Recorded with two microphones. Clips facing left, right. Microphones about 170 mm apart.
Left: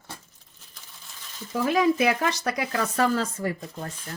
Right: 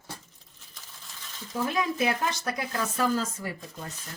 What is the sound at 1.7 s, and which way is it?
Speech, 90° left.